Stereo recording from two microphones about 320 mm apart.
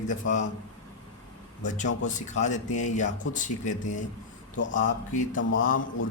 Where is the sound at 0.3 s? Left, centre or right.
Left.